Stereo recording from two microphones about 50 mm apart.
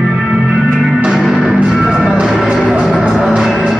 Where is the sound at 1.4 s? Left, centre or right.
Centre.